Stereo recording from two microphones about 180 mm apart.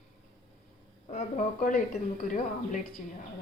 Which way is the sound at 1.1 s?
45° left (ahead or behind).